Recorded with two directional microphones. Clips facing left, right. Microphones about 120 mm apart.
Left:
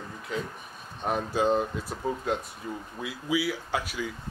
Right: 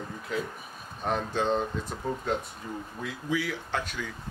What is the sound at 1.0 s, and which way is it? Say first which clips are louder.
Speech: left 2 dB; 5° left (ahead or behind).